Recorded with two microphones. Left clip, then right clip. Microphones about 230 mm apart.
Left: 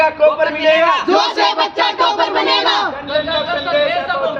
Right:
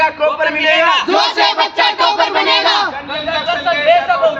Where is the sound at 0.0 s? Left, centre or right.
Centre.